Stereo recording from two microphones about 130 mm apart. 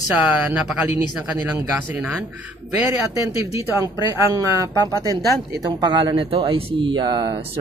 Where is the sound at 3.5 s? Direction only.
25° right (ahead or behind).